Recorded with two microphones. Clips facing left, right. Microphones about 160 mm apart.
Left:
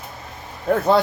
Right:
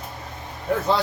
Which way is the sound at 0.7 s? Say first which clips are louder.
Left 4 dB; 55° left (ahead or behind).